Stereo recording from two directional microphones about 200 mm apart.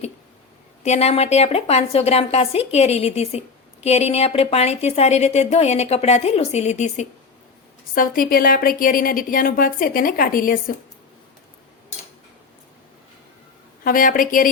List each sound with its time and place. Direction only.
0.8 s a woman's voice: 35° left (ahead or behind)
13.8 s a woman's voice: 45° left (ahead or behind)